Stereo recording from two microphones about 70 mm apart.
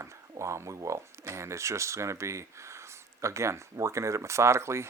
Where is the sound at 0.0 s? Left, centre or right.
Right.